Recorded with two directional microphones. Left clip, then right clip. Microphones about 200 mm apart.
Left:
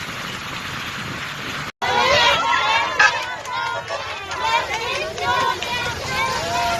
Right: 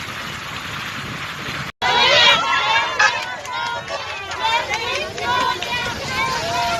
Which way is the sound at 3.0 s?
15° left (ahead or behind).